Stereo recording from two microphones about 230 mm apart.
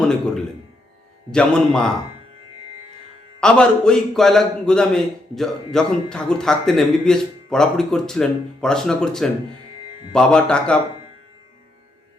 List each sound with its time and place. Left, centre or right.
1.3 s a man's voice: centre
3.4 s a man's voice: centre